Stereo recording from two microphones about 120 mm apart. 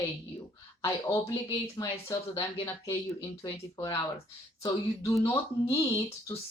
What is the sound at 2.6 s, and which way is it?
Speech, 25° left (ahead or behind).